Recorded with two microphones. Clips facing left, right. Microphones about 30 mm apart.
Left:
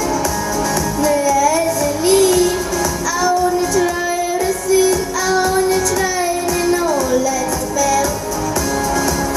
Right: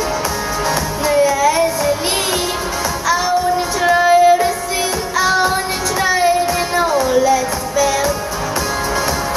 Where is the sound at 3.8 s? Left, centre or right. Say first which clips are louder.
Right 7 dB; right.